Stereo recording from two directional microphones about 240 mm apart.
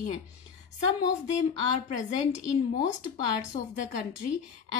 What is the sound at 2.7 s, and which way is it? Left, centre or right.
Speech, left.